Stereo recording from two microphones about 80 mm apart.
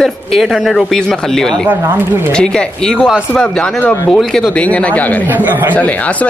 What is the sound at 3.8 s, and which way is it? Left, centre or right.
Speech, left.